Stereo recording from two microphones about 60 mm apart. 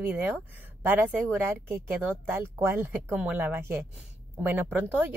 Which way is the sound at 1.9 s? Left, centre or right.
Right.